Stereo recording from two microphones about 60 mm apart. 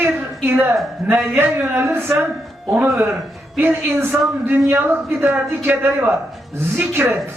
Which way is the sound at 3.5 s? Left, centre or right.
Right.